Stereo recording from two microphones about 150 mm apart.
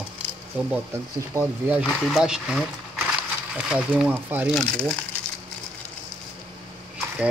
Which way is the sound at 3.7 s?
10° right (ahead or behind).